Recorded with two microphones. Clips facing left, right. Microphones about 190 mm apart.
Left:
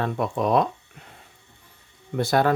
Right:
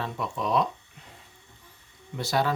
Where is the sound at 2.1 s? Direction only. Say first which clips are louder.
Left 6 dB; 55° left (ahead or behind).